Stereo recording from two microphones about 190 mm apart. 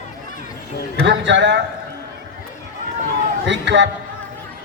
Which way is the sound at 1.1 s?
70° right (ahead or behind).